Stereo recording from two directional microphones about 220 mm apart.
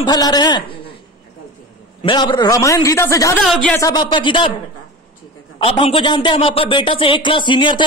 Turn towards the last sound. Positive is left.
turn(degrees=20)  # may be behind; listen again after turning